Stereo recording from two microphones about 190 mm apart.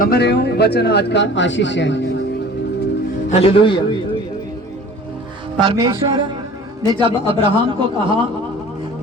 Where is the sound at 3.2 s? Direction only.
30° left (ahead or behind).